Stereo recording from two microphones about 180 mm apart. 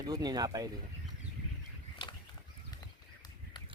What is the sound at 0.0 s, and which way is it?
Speech, 20° right (ahead or behind).